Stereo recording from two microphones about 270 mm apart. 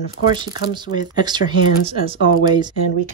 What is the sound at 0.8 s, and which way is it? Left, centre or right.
Speech, centre.